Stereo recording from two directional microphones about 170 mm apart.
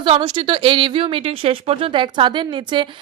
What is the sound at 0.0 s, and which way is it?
A woman's voice, 30° right (ahead or behind).